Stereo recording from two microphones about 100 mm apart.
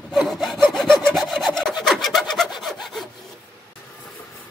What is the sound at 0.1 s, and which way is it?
Sawing, centre (ahead or behind).